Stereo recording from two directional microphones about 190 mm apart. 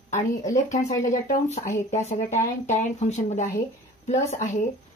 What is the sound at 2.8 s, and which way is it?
Speech, 40° left (ahead or behind).